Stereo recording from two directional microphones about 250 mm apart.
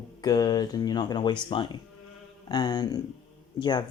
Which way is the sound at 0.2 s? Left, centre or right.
Centre.